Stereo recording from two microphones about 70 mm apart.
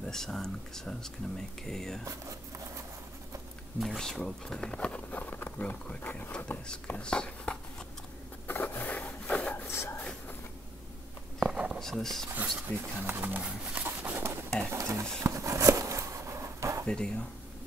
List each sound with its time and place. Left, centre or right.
0.0 s speech: centre
3.8 s speech: centre
8.5 s scrape: left
9.7 s a sound: left
11.5 s a sound: centre
11.8 s speech: centre
12.4 s speech: right
14.7 s a sound: right
16.8 s speech: centre